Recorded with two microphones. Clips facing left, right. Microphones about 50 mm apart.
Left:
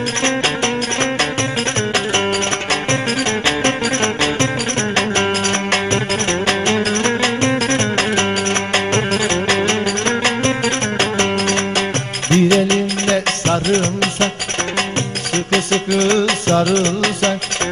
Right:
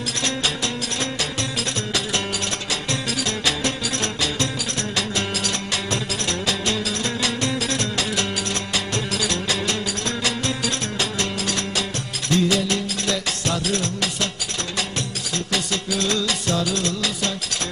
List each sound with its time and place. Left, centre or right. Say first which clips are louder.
2.7 s music: left 7 dB; left
15.3 s music: left 9 dB; left